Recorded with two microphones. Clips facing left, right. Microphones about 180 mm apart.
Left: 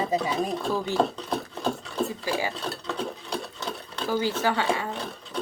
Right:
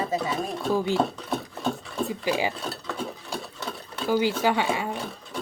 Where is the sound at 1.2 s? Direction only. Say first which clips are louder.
Even; centre (ahead or behind).